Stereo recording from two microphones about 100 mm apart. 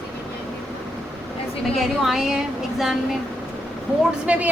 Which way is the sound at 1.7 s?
Centre (ahead or behind).